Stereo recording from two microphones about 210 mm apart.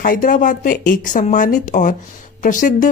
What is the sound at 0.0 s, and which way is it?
A woman's voice, 40° left (ahead or behind).